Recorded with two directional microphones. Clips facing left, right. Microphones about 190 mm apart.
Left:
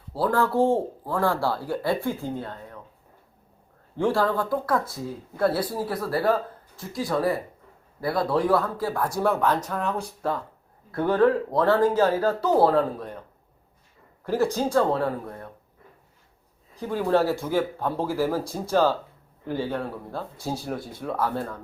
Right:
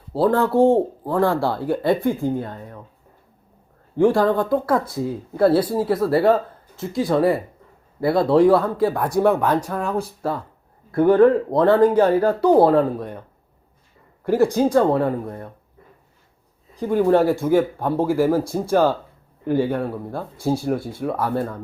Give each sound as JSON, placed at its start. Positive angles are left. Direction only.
{"t": 0.1, "sound": "speech", "side_deg": -25}
{"t": 3.9, "sound": "speech", "side_deg": -15}
{"t": 14.3, "sound": "speech", "side_deg": -15}
{"t": 16.9, "sound": "speech", "side_deg": -15}